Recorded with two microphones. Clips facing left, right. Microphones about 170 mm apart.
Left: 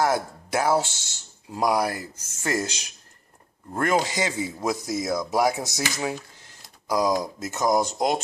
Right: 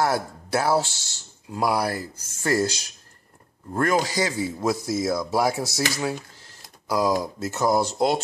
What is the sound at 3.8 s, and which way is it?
Speech, 20° left (ahead or behind).